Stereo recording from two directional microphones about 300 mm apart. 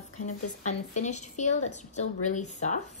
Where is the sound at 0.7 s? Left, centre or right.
Left.